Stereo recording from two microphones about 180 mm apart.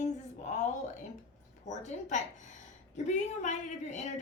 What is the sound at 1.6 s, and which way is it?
A woman's voice, 40° left (ahead or behind).